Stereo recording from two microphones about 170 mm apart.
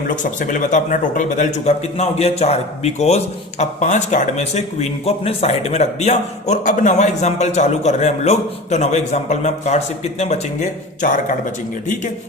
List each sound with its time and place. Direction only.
0.2 s speech: 50° left (ahead or behind)